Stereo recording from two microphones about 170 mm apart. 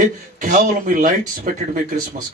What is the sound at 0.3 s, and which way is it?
Speech, 50° right (ahead or behind).